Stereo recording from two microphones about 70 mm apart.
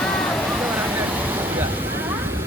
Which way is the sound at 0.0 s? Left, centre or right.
Centre.